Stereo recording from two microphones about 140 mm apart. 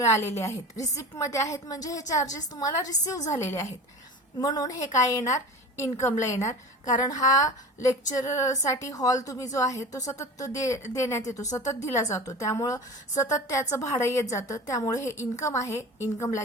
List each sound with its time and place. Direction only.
0.0 s a woman's voice: 20° left (ahead or behind)
4.4 s a woman's voice: 30° left (ahead or behind)